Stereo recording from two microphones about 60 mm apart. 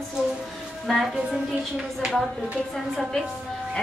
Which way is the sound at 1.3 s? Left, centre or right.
Centre.